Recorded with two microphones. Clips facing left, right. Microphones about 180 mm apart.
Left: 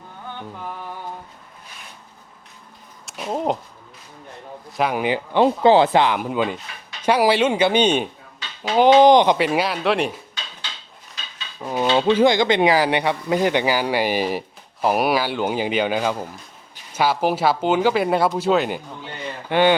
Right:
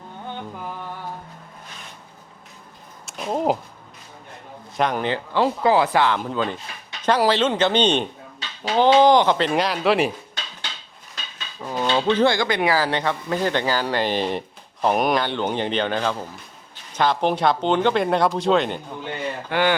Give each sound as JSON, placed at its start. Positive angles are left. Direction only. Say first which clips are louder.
{"t": 3.1, "sound": "a sound", "louder": "right 1 dB", "side_deg": 0}
{"t": 4.8, "sound": "speech", "louder": "left 1 dB", "side_deg": 10}
{"t": 9.5, "sound": "speech", "louder": "even", "side_deg": 5}
{"t": 11.6, "sound": "speech", "louder": "left 3 dB", "side_deg": 15}
{"t": 19.5, "sound": "speech", "louder": "left 5 dB", "side_deg": 20}